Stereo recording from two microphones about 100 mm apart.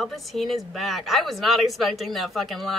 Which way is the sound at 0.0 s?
Centre (ahead or behind).